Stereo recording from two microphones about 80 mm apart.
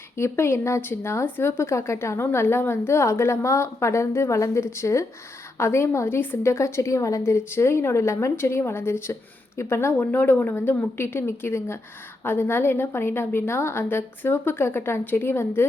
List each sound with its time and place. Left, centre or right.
0.2 s a woman's voice: left